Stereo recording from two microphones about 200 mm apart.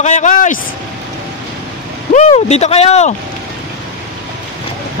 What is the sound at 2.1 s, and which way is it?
Speech, 35° left (ahead or behind).